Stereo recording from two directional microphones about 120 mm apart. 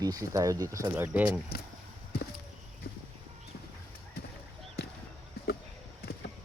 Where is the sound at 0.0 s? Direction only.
30° right (ahead or behind).